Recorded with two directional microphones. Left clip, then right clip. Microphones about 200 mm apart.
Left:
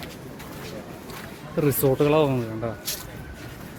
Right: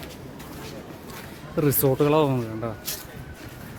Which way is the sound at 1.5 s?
25° right (ahead or behind).